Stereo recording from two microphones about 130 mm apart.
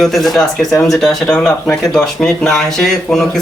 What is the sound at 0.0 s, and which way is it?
Speech, centre (ahead or behind).